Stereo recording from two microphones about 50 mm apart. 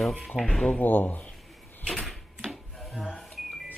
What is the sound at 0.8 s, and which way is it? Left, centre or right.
Speech, left.